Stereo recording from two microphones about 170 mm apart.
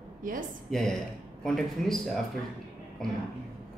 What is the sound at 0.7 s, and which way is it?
Speech, centre (ahead or behind).